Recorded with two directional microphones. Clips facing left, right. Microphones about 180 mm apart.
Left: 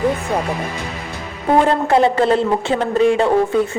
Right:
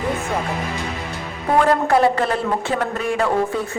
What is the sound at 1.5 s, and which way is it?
A man's voice, 25° left (ahead or behind).